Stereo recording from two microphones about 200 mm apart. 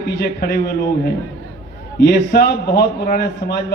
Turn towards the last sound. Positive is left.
turn(degrees=55)  # may be behind; listen again after turning